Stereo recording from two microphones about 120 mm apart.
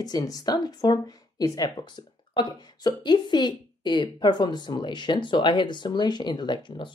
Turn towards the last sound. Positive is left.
turn(degrees=45)  # may be behind; listen again after turning